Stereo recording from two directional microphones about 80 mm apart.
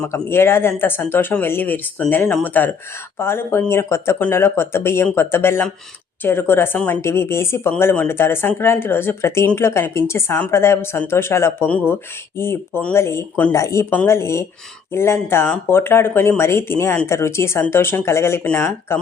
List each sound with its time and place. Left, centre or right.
0.1 s speech: left
7.0 s speech: left